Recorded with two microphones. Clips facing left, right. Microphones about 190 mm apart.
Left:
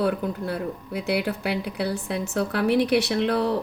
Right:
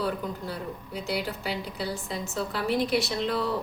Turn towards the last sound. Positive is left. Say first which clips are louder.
# left 5 dB
turn(degrees=65)  # may be behind; listen again after turning